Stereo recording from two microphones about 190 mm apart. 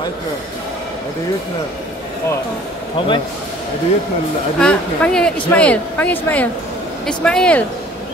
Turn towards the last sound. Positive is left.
turn(degrees=5)  # may be behind; listen again after turning